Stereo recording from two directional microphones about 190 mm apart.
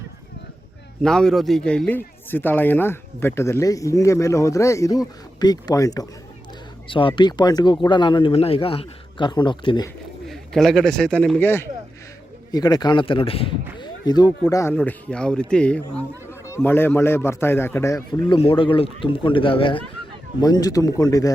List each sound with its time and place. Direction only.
1.0 s a man's voice: 5° left (ahead or behind); by 6.1 s 20° left (ahead or behind)
7.1 s a man's voice: 20° left (ahead or behind)
10.2 s a man's voice: centre (ahead or behind); by 21.3 s 20° left (ahead or behind)